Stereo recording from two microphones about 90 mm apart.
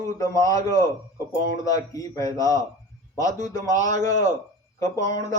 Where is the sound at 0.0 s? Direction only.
35° left (ahead or behind).